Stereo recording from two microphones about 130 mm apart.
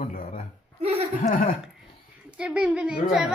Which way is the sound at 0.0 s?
90° left.